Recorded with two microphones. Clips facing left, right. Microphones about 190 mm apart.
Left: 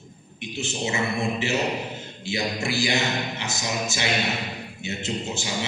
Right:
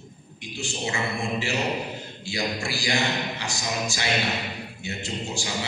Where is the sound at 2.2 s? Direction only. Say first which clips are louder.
Left 2 dB; 20° left (ahead or behind).